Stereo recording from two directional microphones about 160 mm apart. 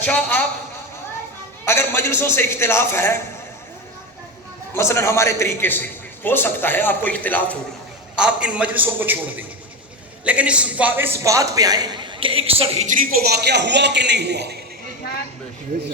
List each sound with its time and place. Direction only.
0.0 s a man's voice: 10° left (ahead or behind)
1.6 s a man's voice: 15° left (ahead or behind)
4.7 s a man's voice: 15° left (ahead or behind)
8.1 s a man's voice: 5° right (ahead or behind); by 13.1 s 50° right (ahead or behind)
13.3 s a man's voice: 90° right